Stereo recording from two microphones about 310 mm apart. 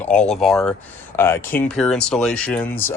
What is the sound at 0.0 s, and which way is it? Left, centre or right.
Speech, centre.